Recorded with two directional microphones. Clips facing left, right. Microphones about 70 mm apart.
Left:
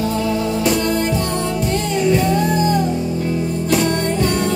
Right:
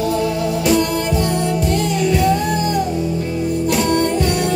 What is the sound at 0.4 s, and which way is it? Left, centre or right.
Music, left.